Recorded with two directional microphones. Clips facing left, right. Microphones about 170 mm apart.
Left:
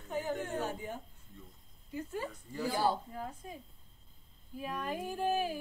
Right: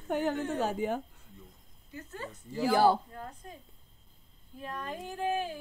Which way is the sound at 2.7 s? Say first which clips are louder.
Right 7 dB; 75° right (ahead or behind).